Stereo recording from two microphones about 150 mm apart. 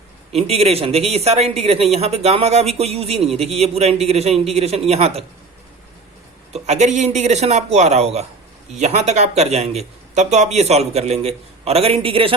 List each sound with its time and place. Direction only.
0.3 s speech: 45° right (ahead or behind)
6.5 s speech: 50° right (ahead or behind)